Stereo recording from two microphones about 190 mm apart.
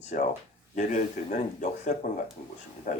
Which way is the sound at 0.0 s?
40° left (ahead or behind).